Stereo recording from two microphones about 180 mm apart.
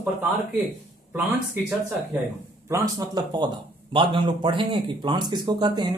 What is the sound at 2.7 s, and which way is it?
Speech, 25° right (ahead or behind).